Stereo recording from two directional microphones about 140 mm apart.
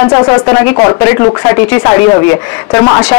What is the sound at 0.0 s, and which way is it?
Speech, 20° left (ahead or behind).